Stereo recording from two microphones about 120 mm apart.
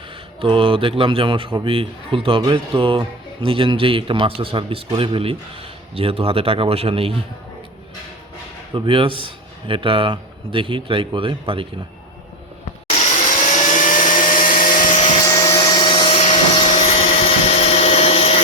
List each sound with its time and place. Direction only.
0.4 s speech: 45° right (ahead or behind)
8.7 s speech: 45° right (ahead or behind)
12.9 s vacuum cleaner: 75° left (ahead or behind); by 15.1 s 90° left
15.2 s vacuum cleaner: 30° left (ahead or behind); by 16.2 s 45° left (ahead or behind)
16.7 s vacuum cleaner: 60° left (ahead or behind)